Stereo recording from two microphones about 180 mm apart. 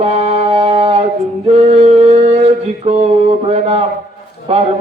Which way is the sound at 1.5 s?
35° right (ahead or behind).